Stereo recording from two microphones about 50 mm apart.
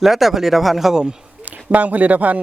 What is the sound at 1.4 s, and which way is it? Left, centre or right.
Speech, right.